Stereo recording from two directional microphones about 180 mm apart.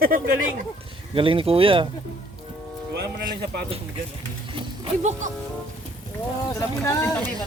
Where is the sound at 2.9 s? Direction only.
65° right (ahead or behind).